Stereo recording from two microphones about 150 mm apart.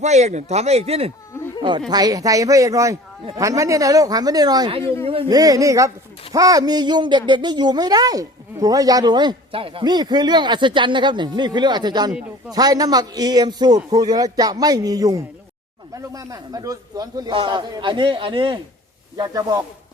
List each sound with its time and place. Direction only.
0.0 s speech: 50° right (ahead or behind)
1.9 s speech: 25° right (ahead or behind)
4.8 s speech: 15° left (ahead or behind)
5.0 s a man's voice: 40° right (ahead or behind)
5.3 s a man's voice: 25° right (ahead or behind)